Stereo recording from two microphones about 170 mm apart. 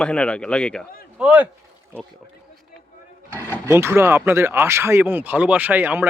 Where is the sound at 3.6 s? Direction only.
15° right (ahead or behind).